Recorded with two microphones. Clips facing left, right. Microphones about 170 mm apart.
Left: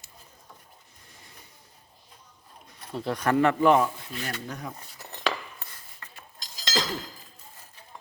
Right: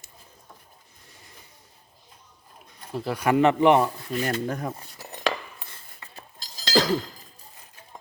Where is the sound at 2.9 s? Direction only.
5° right (ahead or behind); by 3.8 s 20° right (ahead or behind).